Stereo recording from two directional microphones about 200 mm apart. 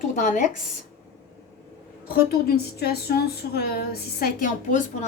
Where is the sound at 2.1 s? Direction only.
50° left (ahead or behind).